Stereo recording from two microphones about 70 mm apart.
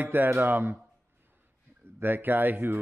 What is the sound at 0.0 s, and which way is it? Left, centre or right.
Speech, right.